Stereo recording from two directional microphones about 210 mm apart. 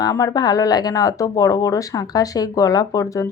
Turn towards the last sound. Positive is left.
turn(degrees=15)  # may be behind; listen again after turning